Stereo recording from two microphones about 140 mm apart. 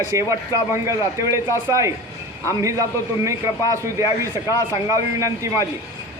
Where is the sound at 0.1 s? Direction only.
20° right (ahead or behind).